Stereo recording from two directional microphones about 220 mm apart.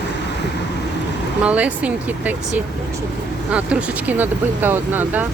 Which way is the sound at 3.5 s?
5° right (ahead or behind).